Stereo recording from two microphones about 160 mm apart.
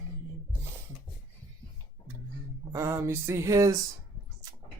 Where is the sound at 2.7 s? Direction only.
20° right (ahead or behind).